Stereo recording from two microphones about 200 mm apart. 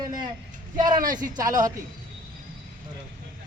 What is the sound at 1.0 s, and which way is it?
Speech, 40° right (ahead or behind).